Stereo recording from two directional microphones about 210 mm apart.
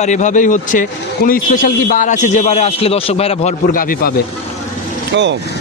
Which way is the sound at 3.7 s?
40° left (ahead or behind).